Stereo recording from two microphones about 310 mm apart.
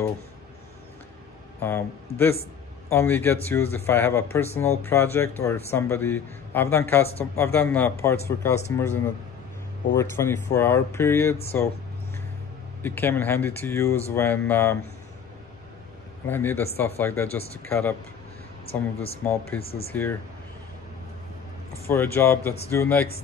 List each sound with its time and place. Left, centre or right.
1.6 s a man's voice: centre
12.8 s a man's voice: centre
16.3 s a man's voice: centre
19.2 s speech: centre
19.6 s speech: centre
19.9 s a man's voice: centre
21.8 s a man's voice: centre